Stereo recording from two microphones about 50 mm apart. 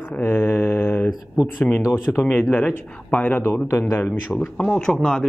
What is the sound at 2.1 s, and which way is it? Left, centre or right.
Speech, left.